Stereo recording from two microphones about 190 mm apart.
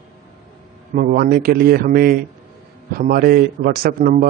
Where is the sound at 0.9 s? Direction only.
50° right (ahead or behind).